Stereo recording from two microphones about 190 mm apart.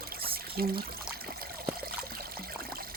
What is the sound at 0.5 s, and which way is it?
Speech, 50° right (ahead or behind).